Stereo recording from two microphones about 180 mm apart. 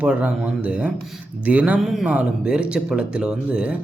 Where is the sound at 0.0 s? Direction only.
10° right (ahead or behind).